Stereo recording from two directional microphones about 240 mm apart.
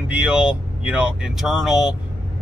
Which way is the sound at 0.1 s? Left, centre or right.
Centre.